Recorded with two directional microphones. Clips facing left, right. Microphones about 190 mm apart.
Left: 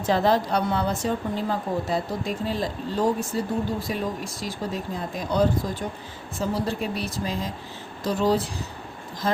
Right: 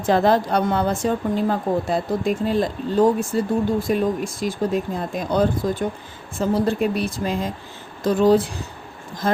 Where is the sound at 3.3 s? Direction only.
60° right (ahead or behind).